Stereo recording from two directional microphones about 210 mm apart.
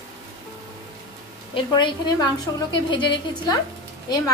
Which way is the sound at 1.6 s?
20° left (ahead or behind).